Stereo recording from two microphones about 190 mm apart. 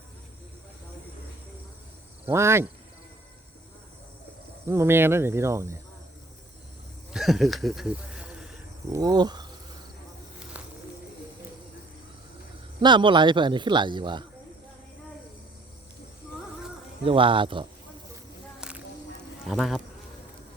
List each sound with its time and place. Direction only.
2.2 s speech: 15° right (ahead or behind)
4.7 s speech: 15° right (ahead or behind)
7.1 s speech: centre (ahead or behind)
8.9 s a man's voice: 20° right (ahead or behind)
10.5 s bird: 10° right (ahead or behind)
12.8 s a man's voice: 25° right (ahead or behind)
17.1 s a man's voice: 25° right (ahead or behind)
18.6 s a sound: 5° right (ahead or behind)
19.5 s speech: centre (ahead or behind)